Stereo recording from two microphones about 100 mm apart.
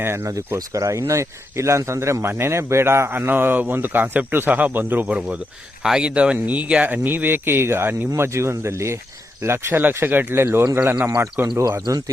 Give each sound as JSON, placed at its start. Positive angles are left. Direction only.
{"t": 0.0, "sound": "speech", "side_deg": -25}
{"t": 5.8, "sound": "speech", "side_deg": -10}
{"t": 11.9, "sound": "speech", "side_deg": -35}